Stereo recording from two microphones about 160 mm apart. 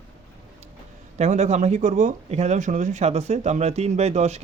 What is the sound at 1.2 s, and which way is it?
Speech, 45° right (ahead or behind).